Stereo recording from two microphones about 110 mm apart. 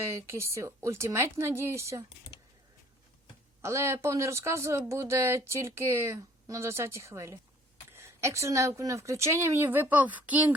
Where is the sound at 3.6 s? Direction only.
25° right (ahead or behind).